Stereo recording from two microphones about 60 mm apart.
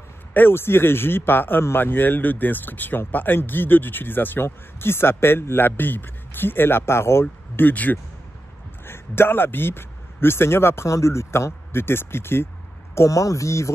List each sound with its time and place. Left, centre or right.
0.3 s speech: left
7.6 s speech: left
8.8 s speech: left
12.9 s speech: left